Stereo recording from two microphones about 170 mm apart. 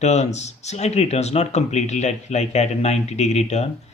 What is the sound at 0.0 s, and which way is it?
Speech, 40° left (ahead or behind).